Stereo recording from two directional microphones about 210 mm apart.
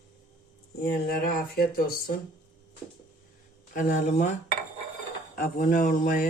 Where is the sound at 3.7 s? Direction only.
35° left (ahead or behind).